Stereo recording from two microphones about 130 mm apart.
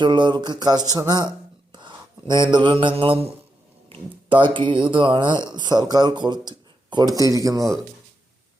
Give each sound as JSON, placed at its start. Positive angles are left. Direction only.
{"t": 0.0, "sound": "speech", "side_deg": -35}
{"t": 1.7, "sound": "mantra", "side_deg": -35}
{"t": 3.8, "sound": "speech", "side_deg": -45}